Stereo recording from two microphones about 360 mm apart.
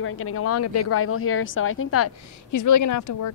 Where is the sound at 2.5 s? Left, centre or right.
Left.